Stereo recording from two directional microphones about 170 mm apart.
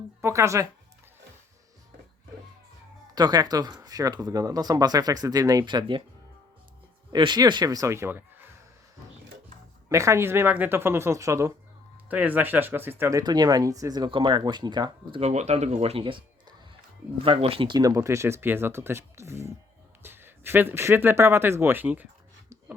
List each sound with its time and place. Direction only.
0.2 s speech: 15° right (ahead or behind)
3.2 s speech: 25° right (ahead or behind)
7.1 s speech: 25° right (ahead or behind)
9.9 s speech: 15° right (ahead or behind)
15.2 s speech: 40° right (ahead or behind); by 22.0 s 10° right (ahead or behind)